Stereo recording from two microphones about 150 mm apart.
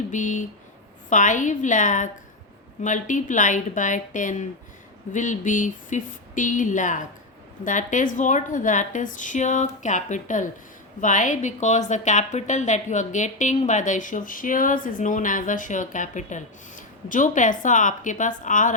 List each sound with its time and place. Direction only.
0.1 s a woman's voice: 55° left (ahead or behind)